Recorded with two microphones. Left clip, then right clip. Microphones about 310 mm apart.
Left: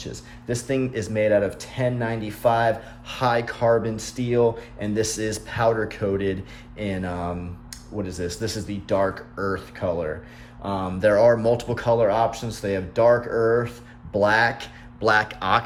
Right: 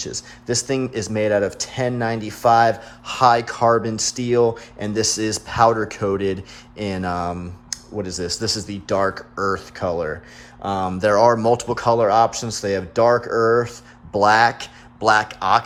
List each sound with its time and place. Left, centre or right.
0.0 s speech: right